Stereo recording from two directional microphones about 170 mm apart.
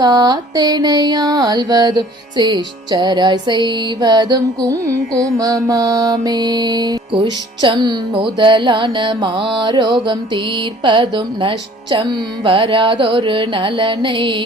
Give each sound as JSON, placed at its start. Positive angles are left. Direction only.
{"t": 0.0, "sound": "music", "side_deg": -25}